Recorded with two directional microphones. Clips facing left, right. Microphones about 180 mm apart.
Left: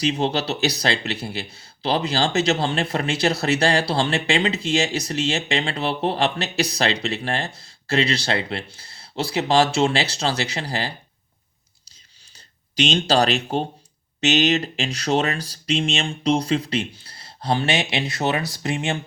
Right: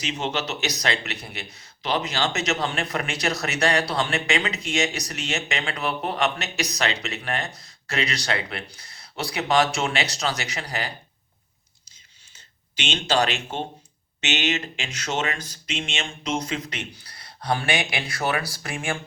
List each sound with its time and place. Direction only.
0.0 s speech: 35° left (ahead or behind)
12.7 s speech: 35° left (ahead or behind)